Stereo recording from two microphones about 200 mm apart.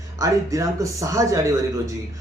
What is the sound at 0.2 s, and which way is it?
Speech, 15° right (ahead or behind).